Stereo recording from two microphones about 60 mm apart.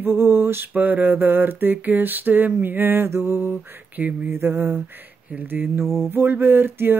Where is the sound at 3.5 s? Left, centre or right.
Right.